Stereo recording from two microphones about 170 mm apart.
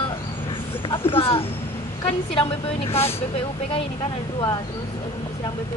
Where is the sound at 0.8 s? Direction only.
30° left (ahead or behind).